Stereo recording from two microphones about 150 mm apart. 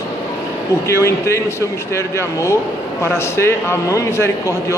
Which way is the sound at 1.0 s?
20° left (ahead or behind).